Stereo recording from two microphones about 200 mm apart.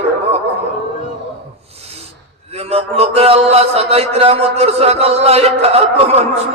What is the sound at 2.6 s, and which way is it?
Speech, 30° right (ahead or behind).